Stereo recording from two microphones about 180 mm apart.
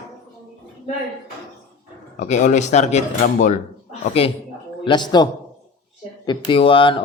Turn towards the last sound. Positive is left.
turn(degrees=30)  # may be behind; listen again after turning